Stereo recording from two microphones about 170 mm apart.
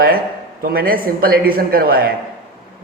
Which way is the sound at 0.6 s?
60° right (ahead or behind).